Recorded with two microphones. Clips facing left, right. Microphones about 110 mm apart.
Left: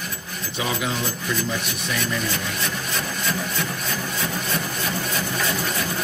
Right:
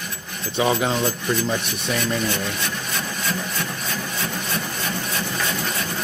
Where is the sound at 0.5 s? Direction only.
35° right (ahead or behind).